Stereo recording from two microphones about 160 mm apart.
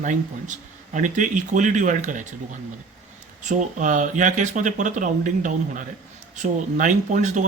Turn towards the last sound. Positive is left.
turn(degrees=-50)  # may be behind; listen again after turning